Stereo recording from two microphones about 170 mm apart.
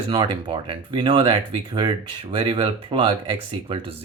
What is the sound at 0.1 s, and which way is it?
Speech, 25° right (ahead or behind).